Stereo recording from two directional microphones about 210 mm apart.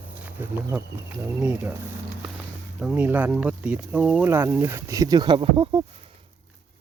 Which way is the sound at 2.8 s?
10° right (ahead or behind).